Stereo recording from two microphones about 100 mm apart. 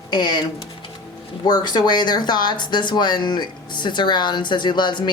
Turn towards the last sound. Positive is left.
turn(degrees=50)  # may be behind; listen again after turning